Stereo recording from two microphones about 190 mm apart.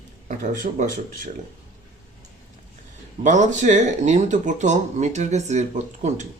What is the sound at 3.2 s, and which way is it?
Speech, 40° right (ahead or behind).